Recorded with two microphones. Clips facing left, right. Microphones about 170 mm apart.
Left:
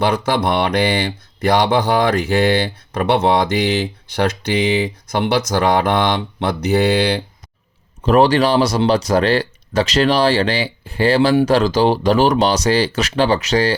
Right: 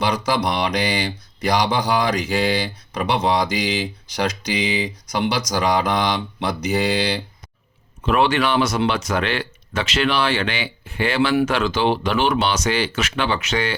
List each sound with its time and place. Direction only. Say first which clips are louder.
0.0 s speech: left 4 dB; 55° left (ahead or behind)
8.0 s speech: left 6 dB; 40° left (ahead or behind)